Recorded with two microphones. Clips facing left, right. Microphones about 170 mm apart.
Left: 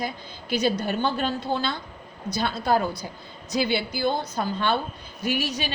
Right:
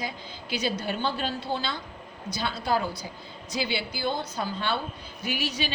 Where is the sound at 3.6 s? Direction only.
50° left (ahead or behind).